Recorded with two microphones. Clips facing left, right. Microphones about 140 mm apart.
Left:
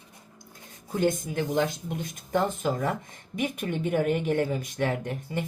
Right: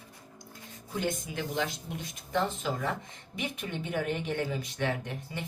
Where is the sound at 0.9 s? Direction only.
50° left (ahead or behind).